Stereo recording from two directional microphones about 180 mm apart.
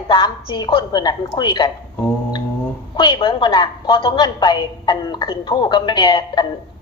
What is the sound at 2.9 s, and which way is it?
A woman's voice, 30° left (ahead or behind).